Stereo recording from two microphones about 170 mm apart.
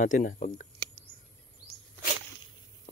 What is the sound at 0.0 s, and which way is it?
Speech, 50° left (ahead or behind).